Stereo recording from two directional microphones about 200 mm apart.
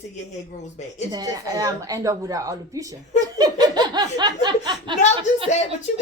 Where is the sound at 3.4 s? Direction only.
20° right (ahead or behind).